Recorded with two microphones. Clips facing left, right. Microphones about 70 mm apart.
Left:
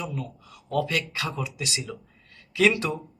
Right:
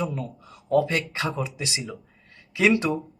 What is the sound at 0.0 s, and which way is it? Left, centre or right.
Speech, right.